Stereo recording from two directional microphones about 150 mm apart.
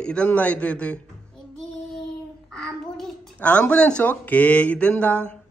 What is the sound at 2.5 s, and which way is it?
A child's voice, 5° left (ahead or behind).